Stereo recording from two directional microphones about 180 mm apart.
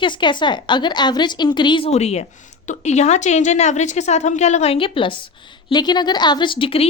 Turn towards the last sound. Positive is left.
turn(degrees=30)  # may be behind; listen again after turning